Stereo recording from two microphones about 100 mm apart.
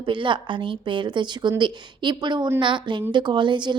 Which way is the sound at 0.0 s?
55° right (ahead or behind).